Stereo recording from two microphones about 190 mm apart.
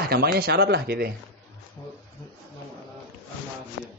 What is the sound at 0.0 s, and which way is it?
Speech, 55° right (ahead or behind).